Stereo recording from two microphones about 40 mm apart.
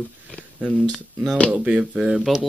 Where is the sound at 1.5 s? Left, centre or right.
Right.